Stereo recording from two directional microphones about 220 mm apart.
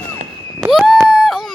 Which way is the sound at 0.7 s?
Centre (ahead or behind).